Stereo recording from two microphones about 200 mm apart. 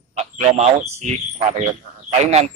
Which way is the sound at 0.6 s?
35° right (ahead or behind).